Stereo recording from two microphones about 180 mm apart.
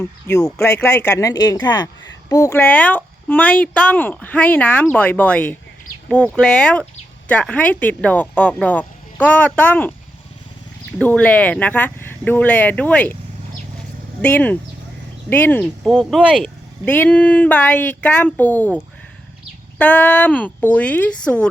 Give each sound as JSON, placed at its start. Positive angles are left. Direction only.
{"t": 0.0, "sound": "speech", "side_deg": 15}
{"t": 10.9, "sound": "speech", "side_deg": 5}
{"t": 14.2, "sound": "speech", "side_deg": 10}
{"t": 19.8, "sound": "speech", "side_deg": 5}